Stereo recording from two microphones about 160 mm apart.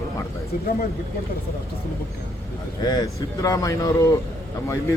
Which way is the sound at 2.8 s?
25° left (ahead or behind).